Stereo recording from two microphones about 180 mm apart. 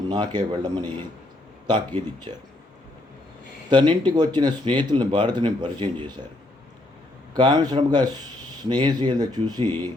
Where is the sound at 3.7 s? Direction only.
25° right (ahead or behind).